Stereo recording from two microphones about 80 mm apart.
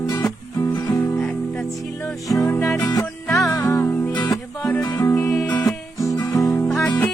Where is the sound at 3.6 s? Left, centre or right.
Left.